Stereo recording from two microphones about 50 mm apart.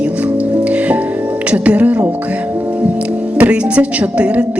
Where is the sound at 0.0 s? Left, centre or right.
Right.